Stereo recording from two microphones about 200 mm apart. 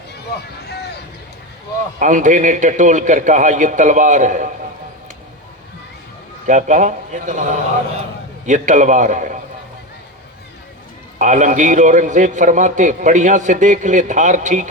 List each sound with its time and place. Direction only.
0.7 s speech: 55° left (ahead or behind)
2.0 s a man's voice: 40° right (ahead or behind)
6.5 s a man's voice: 40° right (ahead or behind)
11.2 s a man's voice: 40° right (ahead or behind)